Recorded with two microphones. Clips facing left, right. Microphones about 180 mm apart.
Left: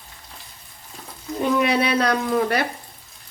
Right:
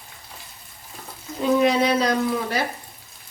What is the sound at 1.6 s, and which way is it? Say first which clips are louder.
Speech: right 1 dB; 65° left (ahead or behind).